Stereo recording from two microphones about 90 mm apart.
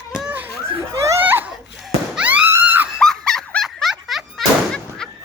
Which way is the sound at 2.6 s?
20° right (ahead or behind).